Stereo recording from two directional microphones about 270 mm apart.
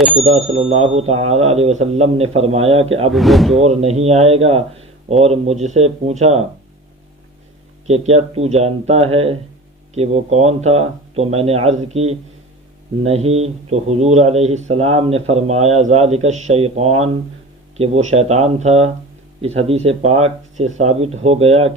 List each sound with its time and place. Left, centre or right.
0.2 s speech: right
3.1 s speech: centre
3.6 s speech: right
7.9 s speech: right